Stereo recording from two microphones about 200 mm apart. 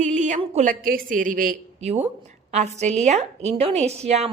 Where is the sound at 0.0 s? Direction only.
35° right (ahead or behind).